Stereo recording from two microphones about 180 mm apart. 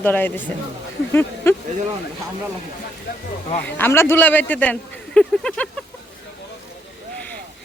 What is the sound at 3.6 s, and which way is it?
Speech, 10° left (ahead or behind).